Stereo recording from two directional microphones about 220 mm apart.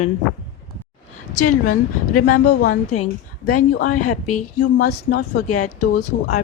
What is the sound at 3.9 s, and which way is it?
Speech, 90° left.